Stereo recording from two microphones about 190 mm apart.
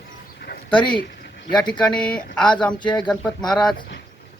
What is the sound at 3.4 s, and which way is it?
Speech, centre (ahead or behind).